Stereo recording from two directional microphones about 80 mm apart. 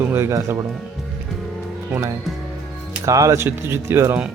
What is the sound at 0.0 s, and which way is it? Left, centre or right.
Speech, right.